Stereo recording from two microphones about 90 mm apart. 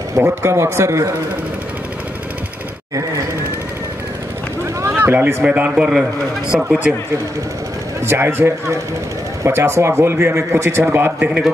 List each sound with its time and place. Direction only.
0.1 s speech: 25° right (ahead or behind)
4.9 s speech: 25° right (ahead or behind); by 6.7 s 5° right (ahead or behind)
8.1 s a man's voice: 25° right (ahead or behind)
11.2 s speech: 10° right (ahead or behind)